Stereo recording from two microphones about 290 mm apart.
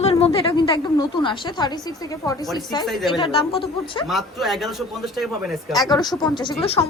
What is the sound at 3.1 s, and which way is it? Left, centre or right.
Speech, centre.